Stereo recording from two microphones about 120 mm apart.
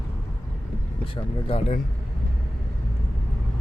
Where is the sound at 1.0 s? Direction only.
50° left (ahead or behind).